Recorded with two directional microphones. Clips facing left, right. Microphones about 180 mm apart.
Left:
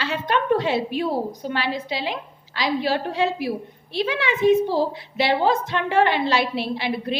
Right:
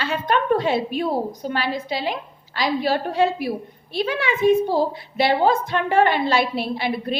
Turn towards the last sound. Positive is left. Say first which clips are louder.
# right 1 dB
turn(degrees=-45)  # may be behind; listen again after turning